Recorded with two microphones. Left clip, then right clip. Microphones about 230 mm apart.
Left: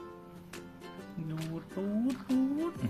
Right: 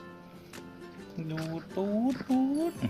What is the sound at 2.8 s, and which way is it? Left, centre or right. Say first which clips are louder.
Speech: right 3 dB; centre.